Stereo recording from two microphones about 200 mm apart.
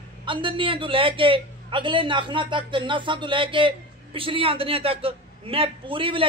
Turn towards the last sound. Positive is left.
turn(degrees=-25)  # may be behind; listen again after turning